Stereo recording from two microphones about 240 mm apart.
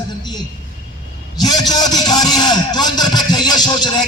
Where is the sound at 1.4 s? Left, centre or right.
Centre.